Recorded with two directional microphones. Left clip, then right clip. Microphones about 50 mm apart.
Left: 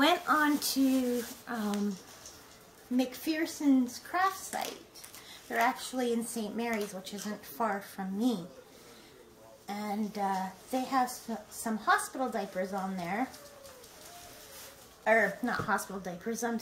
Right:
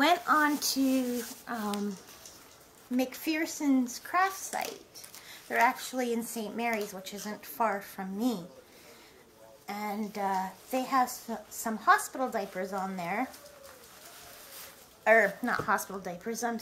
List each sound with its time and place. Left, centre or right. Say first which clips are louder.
0.0 s speech: right 2 dB; right
3.0 s a woman's voice: right 1 dB; right
9.7 s a woman's voice: right 1 dB; right
15.0 s a woman's voice: right 3 dB; right